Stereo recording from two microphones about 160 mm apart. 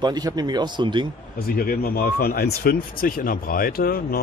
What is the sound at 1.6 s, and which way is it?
Speech, 65° left (ahead or behind).